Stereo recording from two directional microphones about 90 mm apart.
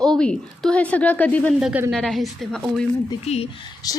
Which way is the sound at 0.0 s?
10° left (ahead or behind).